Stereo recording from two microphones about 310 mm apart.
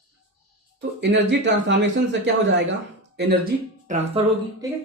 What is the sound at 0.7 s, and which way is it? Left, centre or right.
Speech, right.